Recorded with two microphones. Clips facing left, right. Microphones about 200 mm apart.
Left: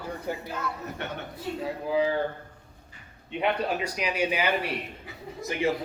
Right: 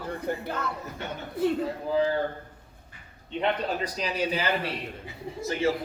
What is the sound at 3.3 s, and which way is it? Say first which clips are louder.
Speech: left 1 dB; 10° left (ahead or behind).